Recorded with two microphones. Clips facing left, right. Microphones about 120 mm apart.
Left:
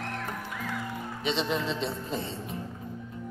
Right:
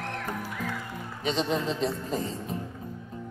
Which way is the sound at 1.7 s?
40° right (ahead or behind).